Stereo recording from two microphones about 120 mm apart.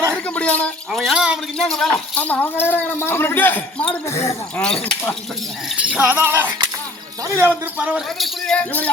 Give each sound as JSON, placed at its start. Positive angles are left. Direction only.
{"t": 0.1, "sound": "a sound", "side_deg": 10}
{"t": 0.9, "sound": "a sound", "side_deg": 0}
{"t": 1.5, "sound": "speech", "side_deg": 5}
{"t": 4.6, "sound": "speech", "side_deg": 5}
{"t": 5.6, "sound": "speech", "side_deg": -10}
{"t": 8.2, "sound": "speech", "side_deg": 10}